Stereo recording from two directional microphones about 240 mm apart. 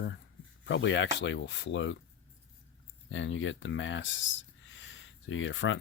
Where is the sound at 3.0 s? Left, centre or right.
Left.